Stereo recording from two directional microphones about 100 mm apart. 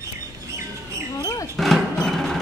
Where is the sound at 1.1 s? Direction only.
35° left (ahead or behind).